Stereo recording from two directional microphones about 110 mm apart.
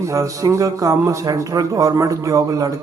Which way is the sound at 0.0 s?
30° right (ahead or behind).